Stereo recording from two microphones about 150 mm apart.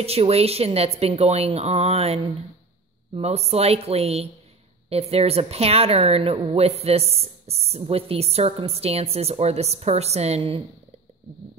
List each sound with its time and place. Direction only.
0.0 s a woman's voice: 40° right (ahead or behind)